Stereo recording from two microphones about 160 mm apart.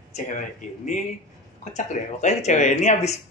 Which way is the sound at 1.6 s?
45° left (ahead or behind).